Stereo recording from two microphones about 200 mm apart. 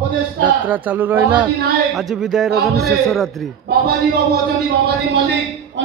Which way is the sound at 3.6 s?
50° right (ahead or behind).